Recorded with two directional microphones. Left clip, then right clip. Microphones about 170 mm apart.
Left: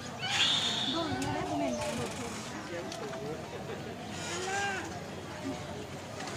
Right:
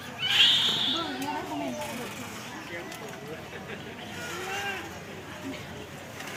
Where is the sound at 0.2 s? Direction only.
65° left (ahead or behind).